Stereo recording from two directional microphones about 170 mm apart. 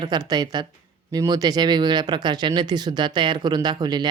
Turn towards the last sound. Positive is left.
turn(degrees=-25)  # may be behind; listen again after turning